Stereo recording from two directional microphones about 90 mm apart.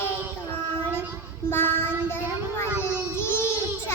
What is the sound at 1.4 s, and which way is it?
Child singing, 25° left (ahead or behind).